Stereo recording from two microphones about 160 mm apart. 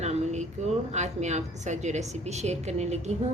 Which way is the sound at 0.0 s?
45° right (ahead or behind).